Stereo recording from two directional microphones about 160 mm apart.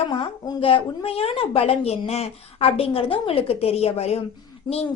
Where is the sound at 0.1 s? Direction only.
30° left (ahead or behind).